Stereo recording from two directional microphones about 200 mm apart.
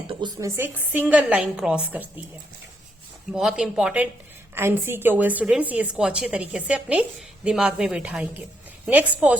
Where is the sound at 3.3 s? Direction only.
5° right (ahead or behind).